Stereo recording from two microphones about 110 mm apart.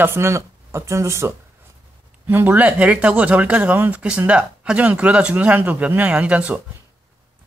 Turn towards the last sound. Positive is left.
turn(degrees=-10)  # may be behind; listen again after turning